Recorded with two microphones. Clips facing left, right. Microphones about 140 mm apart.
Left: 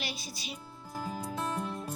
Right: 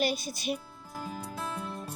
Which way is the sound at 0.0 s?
50° right (ahead or behind).